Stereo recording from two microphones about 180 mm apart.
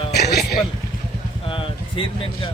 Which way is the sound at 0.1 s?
65° left (ahead or behind).